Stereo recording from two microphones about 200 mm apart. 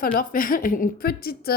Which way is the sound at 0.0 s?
45° left (ahead or behind).